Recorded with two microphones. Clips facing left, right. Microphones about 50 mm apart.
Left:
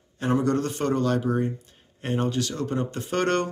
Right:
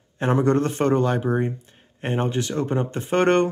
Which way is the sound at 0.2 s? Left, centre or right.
Right.